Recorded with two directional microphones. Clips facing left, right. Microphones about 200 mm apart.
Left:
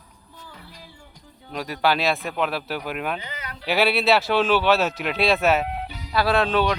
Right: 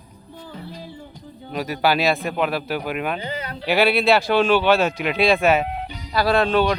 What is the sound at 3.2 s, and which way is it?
Speech, 30° right (ahead or behind).